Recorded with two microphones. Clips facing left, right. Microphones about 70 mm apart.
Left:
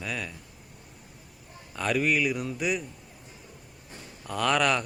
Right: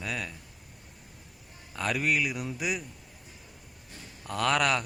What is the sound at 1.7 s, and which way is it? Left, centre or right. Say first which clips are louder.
Speech: left 3 dB; centre.